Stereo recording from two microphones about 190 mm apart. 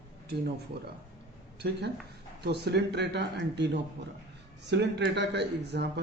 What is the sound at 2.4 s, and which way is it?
Speech, 60° right (ahead or behind).